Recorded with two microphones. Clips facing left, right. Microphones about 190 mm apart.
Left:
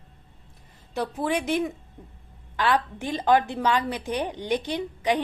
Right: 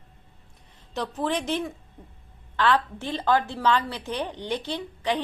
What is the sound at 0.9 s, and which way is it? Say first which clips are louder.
A woman's voice: left 1 dB; 10° left (ahead or behind).